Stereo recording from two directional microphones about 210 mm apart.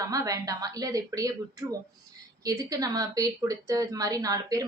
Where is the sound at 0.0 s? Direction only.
15° right (ahead or behind).